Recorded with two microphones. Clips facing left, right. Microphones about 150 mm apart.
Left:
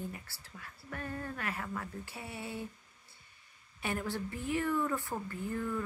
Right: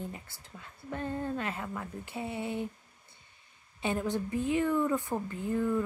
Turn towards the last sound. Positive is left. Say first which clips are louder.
# right 6 dB
turn(degrees=-20)  # may be behind; listen again after turning